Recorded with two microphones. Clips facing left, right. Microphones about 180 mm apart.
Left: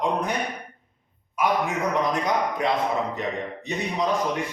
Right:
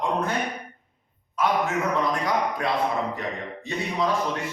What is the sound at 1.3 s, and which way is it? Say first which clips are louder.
Speech: even; 10° left (ahead or behind).